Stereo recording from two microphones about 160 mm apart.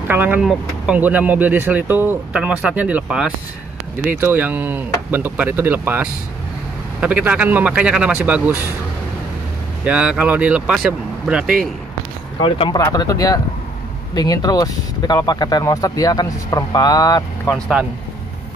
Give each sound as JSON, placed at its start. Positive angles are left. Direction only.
{"t": 0.1, "sound": "speech", "side_deg": -10}
{"t": 9.8, "sound": "speech", "side_deg": -5}
{"t": 12.4, "sound": "speech", "side_deg": 30}